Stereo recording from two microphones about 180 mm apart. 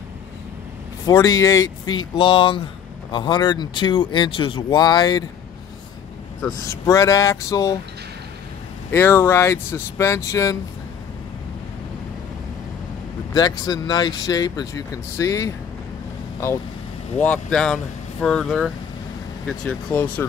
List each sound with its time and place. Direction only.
1.0 s speech: 20° left (ahead or behind)
6.4 s speech: 15° left (ahead or behind)
8.9 s speech: 15° left (ahead or behind)
13.3 s speech: 20° left (ahead or behind)
17.2 s speech: 5° left (ahead or behind)